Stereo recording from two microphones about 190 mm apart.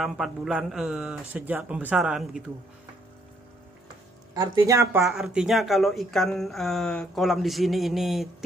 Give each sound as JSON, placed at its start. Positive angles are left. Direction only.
{"t": 0.0, "sound": "speech", "side_deg": 0}
{"t": 4.3, "sound": "speech", "side_deg": -20}
{"t": 5.0, "sound": "speech", "side_deg": 0}